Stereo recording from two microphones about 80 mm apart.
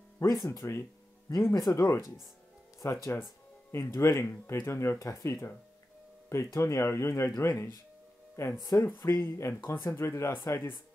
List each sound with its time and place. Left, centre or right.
0.3 s speech: left
9.0 s speech: left